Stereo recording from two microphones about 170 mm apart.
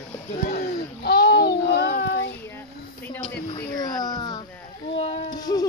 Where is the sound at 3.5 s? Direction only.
25° left (ahead or behind).